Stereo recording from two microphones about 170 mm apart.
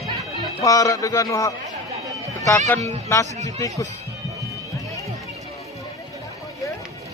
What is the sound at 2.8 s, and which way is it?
Speech, 15° left (ahead or behind).